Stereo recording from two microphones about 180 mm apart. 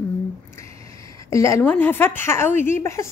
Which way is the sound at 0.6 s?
15° left (ahead or behind).